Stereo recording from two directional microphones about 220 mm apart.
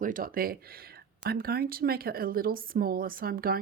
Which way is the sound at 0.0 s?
40° right (ahead or behind).